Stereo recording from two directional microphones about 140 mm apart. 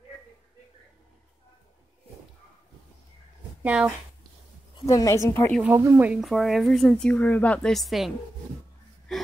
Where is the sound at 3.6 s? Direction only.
10° right (ahead or behind).